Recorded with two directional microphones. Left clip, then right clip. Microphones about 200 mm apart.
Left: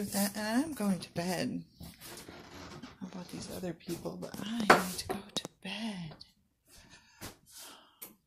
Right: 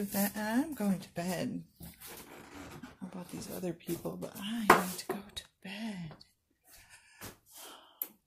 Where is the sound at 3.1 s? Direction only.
15° right (ahead or behind).